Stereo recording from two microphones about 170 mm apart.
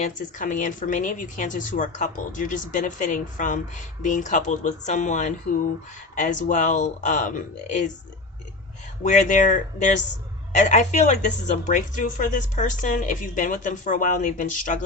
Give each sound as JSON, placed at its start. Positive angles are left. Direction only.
{"t": 0.0, "sound": "speech", "side_deg": 50}
{"t": 9.0, "sound": "speech", "side_deg": 50}